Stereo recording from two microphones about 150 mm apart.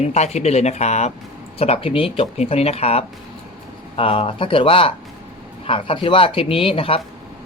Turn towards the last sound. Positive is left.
turn(degrees=35)  # may be behind; listen again after turning